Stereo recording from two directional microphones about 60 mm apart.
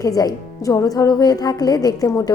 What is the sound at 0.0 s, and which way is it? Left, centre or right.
A woman's voice, left.